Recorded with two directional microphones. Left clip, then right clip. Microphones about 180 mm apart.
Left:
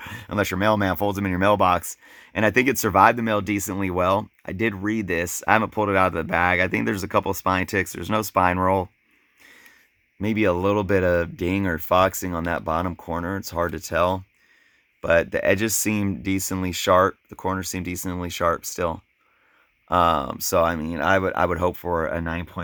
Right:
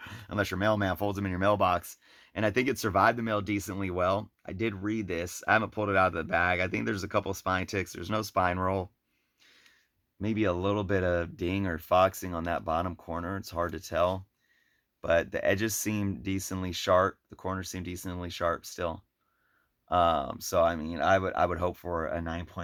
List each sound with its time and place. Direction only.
0.0 s speech: 45° left (ahead or behind)
10.2 s speech: 45° left (ahead or behind)